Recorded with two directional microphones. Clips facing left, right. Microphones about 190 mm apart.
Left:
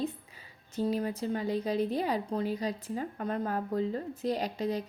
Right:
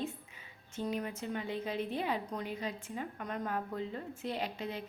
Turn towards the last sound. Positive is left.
turn(degrees=40)  # may be behind; listen again after turning